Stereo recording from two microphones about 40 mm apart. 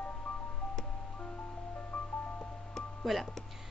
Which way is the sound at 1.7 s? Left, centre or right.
Left.